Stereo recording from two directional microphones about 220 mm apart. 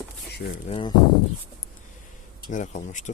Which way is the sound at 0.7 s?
20° left (ahead or behind).